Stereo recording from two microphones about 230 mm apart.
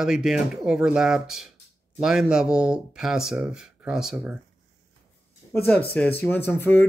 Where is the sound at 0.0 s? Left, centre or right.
Centre.